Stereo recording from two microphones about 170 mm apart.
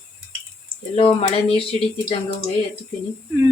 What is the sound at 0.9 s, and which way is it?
Speech, 35° left (ahead or behind).